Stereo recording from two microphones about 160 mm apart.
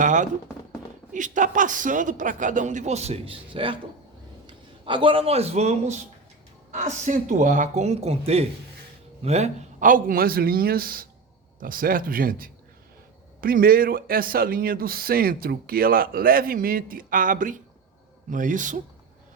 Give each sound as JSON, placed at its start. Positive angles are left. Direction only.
{"t": 0.0, "sound": "music", "side_deg": -50}
{"t": 1.1, "sound": "a man's voice", "side_deg": -50}